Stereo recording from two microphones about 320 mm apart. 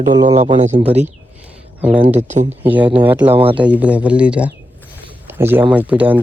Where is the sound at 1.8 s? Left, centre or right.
Centre.